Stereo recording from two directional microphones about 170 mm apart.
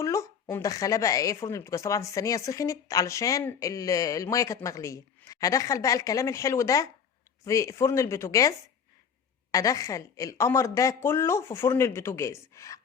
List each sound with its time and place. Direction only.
0.0 s speech: 20° left (ahead or behind)